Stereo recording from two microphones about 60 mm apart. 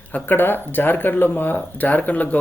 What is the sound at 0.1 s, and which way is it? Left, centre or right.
Speech, left.